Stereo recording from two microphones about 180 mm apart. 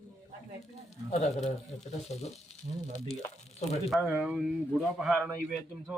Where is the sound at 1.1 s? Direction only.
40° left (ahead or behind).